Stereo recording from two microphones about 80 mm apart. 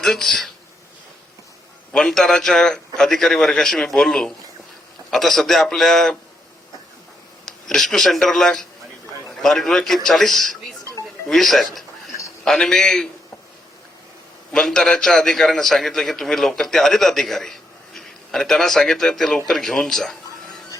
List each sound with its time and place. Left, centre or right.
0.0 s a man's voice: centre
1.9 s a man's voice: centre
7.4 s a man's voice: centre
14.5 s a man's voice: centre